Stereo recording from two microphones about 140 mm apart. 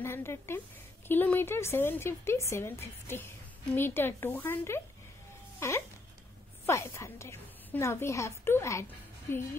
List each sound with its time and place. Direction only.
0.0 s a woman's voice: 20° left (ahead or behind)